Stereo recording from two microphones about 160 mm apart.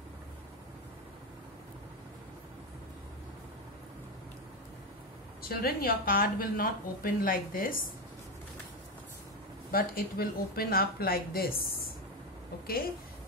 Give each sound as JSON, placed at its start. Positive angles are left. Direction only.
{"t": 5.4, "sound": "a woman's voice", "side_deg": 70}
{"t": 9.7, "sound": "speech", "side_deg": 65}